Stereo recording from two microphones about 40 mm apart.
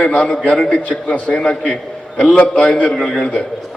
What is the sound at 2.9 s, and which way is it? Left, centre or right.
Speech, centre.